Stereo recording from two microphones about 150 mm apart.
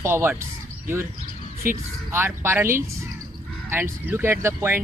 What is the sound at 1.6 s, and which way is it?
Speech, 65° right (ahead or behind).